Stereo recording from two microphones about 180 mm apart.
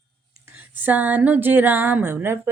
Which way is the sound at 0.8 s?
10° right (ahead or behind).